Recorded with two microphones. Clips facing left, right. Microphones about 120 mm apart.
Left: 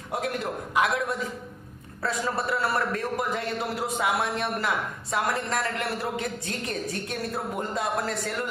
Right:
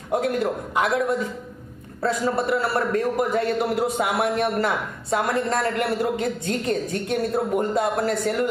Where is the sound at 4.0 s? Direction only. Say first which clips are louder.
Right 5 dB; 40° right (ahead or behind).